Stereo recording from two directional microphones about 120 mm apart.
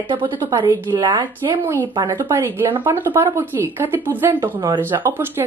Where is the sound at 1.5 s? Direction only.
20° right (ahead or behind).